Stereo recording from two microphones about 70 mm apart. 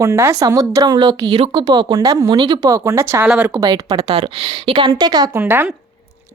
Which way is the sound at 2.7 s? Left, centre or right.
Right.